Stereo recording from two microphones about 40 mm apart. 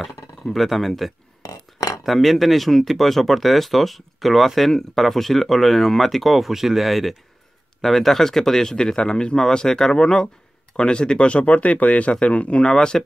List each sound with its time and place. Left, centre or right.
0.0 s speech: centre; by 12.6 s left
12.6 s speech: centre